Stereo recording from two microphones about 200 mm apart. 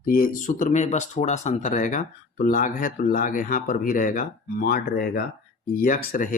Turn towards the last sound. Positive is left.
turn(degrees=45)  # may be behind; listen again after turning